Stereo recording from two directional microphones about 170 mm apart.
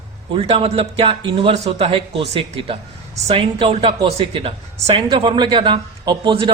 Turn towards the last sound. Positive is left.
turn(degrees=-30)  # may be behind; listen again after turning